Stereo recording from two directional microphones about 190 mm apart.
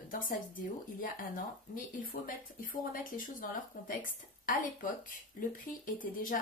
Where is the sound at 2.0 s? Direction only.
45° left (ahead or behind).